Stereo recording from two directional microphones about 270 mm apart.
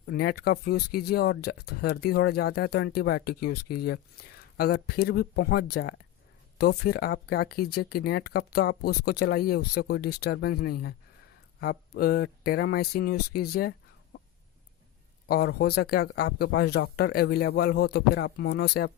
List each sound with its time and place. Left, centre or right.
0.1 s speech: left
15.3 s speech: left